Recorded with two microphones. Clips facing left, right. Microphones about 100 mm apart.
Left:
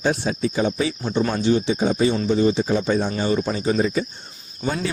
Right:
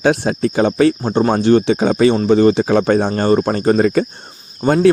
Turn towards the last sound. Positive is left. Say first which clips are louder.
# right 11 dB
turn(degrees=-60)  # may be behind; listen again after turning